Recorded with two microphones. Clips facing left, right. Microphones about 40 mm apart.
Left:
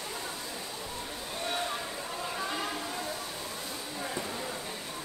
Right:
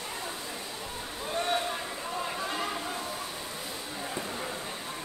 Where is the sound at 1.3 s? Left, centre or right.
Right.